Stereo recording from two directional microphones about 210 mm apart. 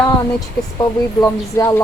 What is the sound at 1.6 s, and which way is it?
Speech, 15° left (ahead or behind).